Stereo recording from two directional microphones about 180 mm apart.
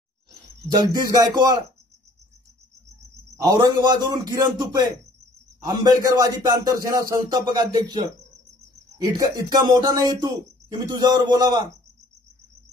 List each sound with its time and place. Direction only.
0.7 s speech: 20° right (ahead or behind)
3.4 s speech: 25° right (ahead or behind)